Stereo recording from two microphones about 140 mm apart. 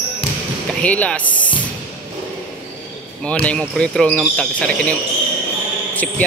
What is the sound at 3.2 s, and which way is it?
Speech, 10° left (ahead or behind).